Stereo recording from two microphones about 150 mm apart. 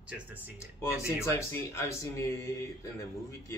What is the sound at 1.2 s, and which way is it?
Speech, 20° left (ahead or behind).